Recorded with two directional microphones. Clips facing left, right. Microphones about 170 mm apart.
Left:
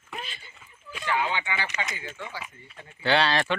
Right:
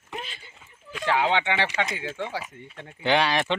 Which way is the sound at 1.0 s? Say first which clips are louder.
Right 5 dB; 80° right.